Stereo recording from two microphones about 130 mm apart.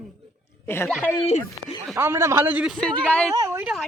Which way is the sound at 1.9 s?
20° right (ahead or behind).